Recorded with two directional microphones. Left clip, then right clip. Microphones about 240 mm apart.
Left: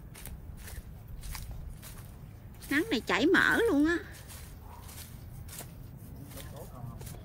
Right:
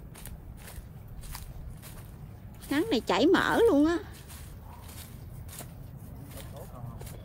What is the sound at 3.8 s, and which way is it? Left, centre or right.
Speech, centre.